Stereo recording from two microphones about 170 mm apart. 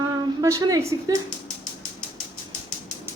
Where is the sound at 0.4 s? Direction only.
20° right (ahead or behind).